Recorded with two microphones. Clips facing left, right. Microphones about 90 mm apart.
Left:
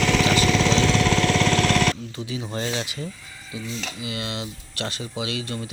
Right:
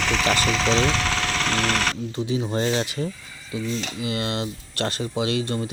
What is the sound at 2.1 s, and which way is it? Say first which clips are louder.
Speech: right 5 dB; 35° right (ahead or behind).